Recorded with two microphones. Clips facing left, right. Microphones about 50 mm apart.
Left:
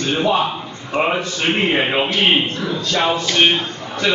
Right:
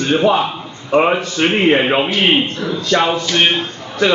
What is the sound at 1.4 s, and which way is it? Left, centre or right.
Speech, right.